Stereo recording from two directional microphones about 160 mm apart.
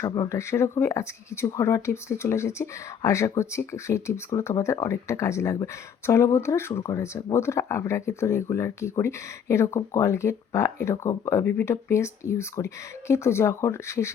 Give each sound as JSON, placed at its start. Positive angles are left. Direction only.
{"t": 0.0, "sound": "speech", "side_deg": 20}